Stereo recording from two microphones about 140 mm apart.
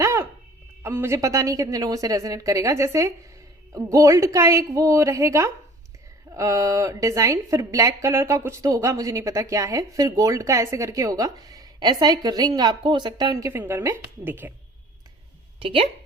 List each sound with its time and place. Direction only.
0.0 s a sound: 20° right (ahead or behind)
0.8 s a woman's voice: 20° right (ahead or behind)
15.5 s speech: 40° right (ahead or behind)